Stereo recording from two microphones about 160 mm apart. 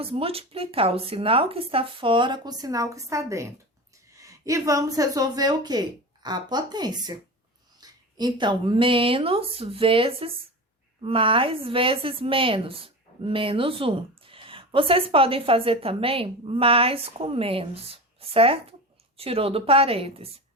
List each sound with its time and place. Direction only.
0.0 s a woman's voice: 35° right (ahead or behind)